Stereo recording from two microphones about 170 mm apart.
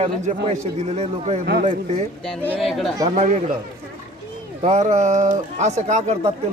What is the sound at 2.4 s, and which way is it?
Speech, centre (ahead or behind).